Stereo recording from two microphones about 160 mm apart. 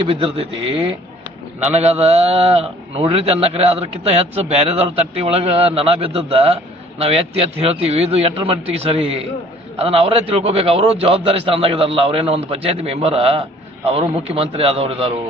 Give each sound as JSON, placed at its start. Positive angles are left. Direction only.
{"t": 0.1, "sound": "a man's voice", "side_deg": -35}
{"t": 1.6, "sound": "a man's voice", "side_deg": -40}
{"t": 7.6, "sound": "a man's voice", "side_deg": -40}